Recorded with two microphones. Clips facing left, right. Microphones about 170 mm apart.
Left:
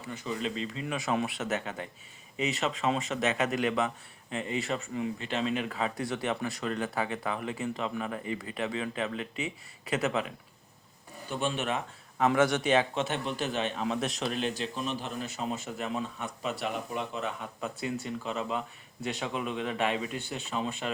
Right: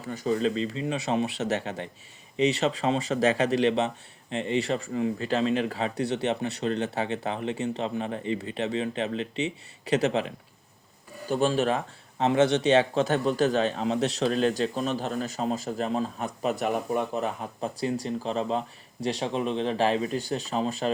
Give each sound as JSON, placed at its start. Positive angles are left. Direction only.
{"t": 0.1, "sound": "a man's voice", "side_deg": -40}